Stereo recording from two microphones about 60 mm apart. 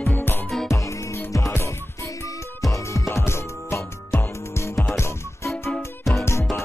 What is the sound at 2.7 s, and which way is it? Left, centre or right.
Music, left.